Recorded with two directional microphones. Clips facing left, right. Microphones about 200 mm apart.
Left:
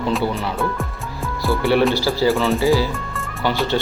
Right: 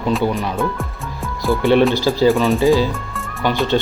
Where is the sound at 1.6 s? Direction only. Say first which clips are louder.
Right 3 dB; 20° right (ahead or behind).